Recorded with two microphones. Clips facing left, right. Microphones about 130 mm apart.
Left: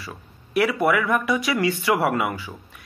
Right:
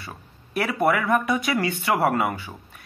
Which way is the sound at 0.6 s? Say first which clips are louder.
Left 2 dB; 40° right (ahead or behind).